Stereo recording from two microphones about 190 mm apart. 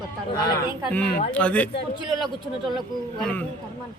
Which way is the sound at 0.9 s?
5° left (ahead or behind).